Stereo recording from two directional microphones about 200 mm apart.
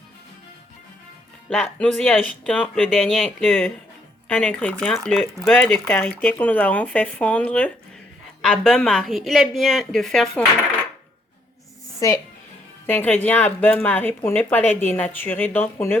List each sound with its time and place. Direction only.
1.5 s a woman's voice: 5° left (ahead or behind)
11.9 s a woman's voice: 15° left (ahead or behind)